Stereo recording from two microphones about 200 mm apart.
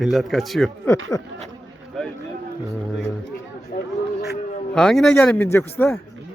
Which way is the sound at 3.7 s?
55° left (ahead or behind).